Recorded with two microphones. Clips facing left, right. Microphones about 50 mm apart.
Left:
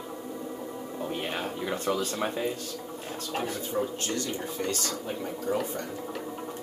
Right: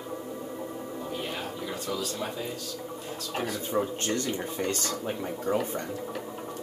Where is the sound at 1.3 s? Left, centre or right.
Left.